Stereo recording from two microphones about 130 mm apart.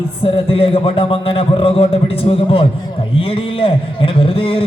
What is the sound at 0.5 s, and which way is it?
Speech, 45° left (ahead or behind).